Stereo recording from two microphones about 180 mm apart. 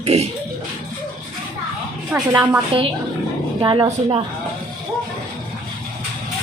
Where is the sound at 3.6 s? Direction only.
25° right (ahead or behind).